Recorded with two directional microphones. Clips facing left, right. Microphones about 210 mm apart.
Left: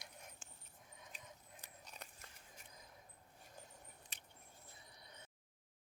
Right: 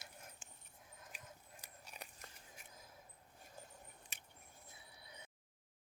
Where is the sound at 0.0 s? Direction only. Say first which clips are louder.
Even; centre (ahead or behind).